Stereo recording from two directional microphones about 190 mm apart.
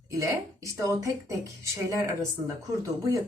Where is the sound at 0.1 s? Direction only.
15° right (ahead or behind).